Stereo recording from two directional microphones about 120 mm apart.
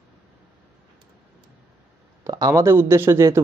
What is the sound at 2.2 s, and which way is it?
Speech, 30° right (ahead or behind).